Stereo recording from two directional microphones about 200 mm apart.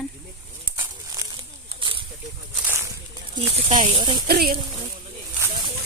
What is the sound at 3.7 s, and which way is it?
Speech, 35° right (ahead or behind).